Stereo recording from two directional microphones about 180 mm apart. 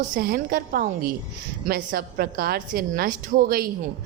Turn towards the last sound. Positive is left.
turn(degrees=-55)  # may be behind; listen again after turning